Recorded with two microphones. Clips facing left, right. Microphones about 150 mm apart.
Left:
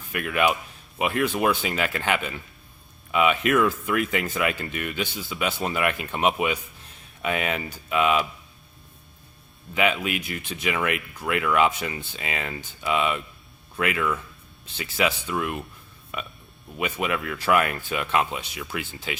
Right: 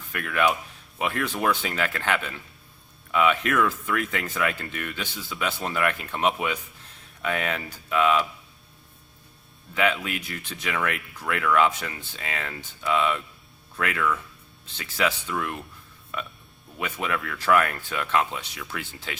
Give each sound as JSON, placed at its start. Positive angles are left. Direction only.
{"t": 0.1, "sound": "speech", "side_deg": 15}
{"t": 9.7, "sound": "speech", "side_deg": 15}